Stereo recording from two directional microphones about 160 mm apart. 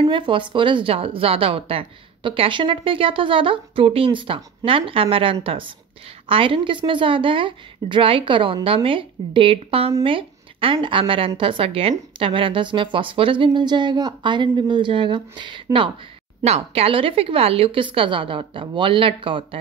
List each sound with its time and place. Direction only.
0.0 s a woman's voice: 30° right (ahead or behind)